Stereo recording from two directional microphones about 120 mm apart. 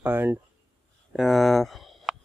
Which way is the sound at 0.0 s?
15° right (ahead or behind).